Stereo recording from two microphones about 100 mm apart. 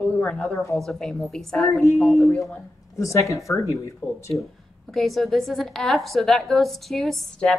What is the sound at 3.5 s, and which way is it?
Speech, 30° left (ahead or behind).